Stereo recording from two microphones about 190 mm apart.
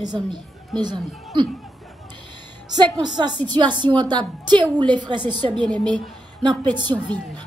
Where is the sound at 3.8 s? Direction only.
25° right (ahead or behind).